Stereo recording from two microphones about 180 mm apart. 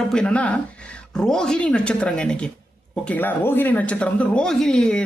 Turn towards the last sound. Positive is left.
turn(degrees=5)  # may be behind; listen again after turning